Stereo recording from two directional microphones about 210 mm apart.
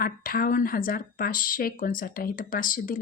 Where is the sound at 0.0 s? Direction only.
45° left (ahead or behind).